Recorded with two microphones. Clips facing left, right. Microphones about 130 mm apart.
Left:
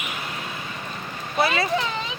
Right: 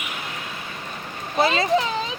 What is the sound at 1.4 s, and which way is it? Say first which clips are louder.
Speech: right 2 dB; 25° right (ahead or behind).